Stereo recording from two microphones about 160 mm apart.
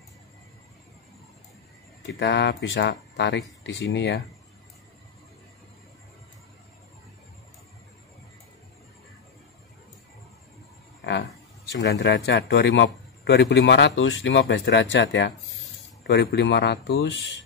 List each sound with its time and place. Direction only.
2.0 s a man's voice: 90° left
11.7 s a man's voice: 90° left